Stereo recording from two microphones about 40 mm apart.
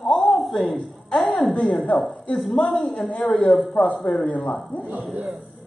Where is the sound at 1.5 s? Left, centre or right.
Left.